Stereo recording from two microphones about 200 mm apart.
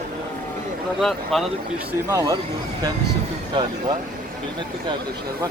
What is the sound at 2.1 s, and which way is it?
Speech, 15° right (ahead or behind).